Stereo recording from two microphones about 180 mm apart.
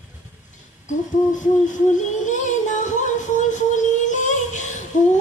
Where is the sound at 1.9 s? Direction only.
45° left (ahead or behind).